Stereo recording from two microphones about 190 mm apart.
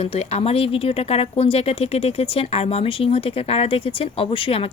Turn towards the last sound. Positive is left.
turn(degrees=30)  # may be behind; listen again after turning